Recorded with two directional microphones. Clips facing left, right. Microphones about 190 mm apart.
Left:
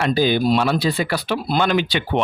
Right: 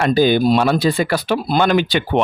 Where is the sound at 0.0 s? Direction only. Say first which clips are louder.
Right 4 dB; 50° right (ahead or behind).